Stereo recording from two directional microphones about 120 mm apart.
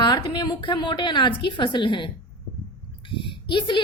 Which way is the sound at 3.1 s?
45° left (ahead or behind).